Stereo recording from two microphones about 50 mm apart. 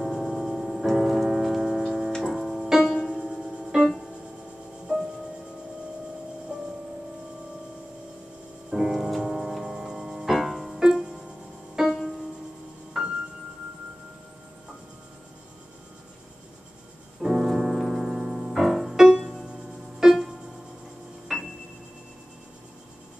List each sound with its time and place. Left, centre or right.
0.0 s tick-tock: centre
2.3 s music: centre
3.1 s music: centre
4.9 s music: centre
8.6 s music: centre
9.8 s tick-tock: centre
10.3 s music: centre
10.8 s music: centre
12.9 s music: centre
17.2 s music: centre
21.3 s a sound: centre